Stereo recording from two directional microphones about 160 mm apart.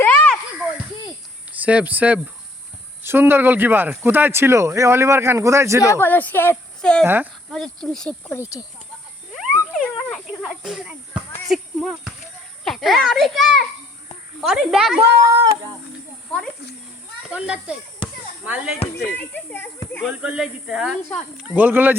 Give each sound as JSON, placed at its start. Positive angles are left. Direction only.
{"t": 0.0, "sound": "a sound", "side_deg": 10}
{"t": 1.6, "sound": "speech", "side_deg": -10}
{"t": 5.8, "sound": "speech", "side_deg": 15}
{"t": 7.0, "sound": "speech", "side_deg": -15}
{"t": 7.5, "sound": "a child's voice", "side_deg": 5}
{"t": 8.4, "sound": "speech", "side_deg": 20}
{"t": 9.7, "sound": "a sound", "side_deg": 5}
{"t": 11.4, "sound": "a child's voice", "side_deg": 0}
{"t": 15.3, "sound": "a sound", "side_deg": -25}
{"t": 17.3, "sound": "speech", "side_deg": -5}
{"t": 19.1, "sound": "speech", "side_deg": 10}
{"t": 20.1, "sound": "speech", "side_deg": -5}